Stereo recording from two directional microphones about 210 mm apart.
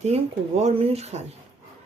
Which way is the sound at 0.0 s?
30° right (ahead or behind).